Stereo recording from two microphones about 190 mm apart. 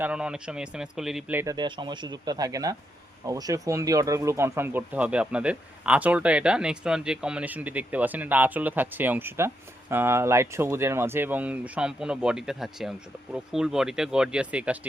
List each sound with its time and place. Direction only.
0.0 s speech: 5° right (ahead or behind)
1.5 s speech: 25° right (ahead or behind); by 14.8 s 5° right (ahead or behind)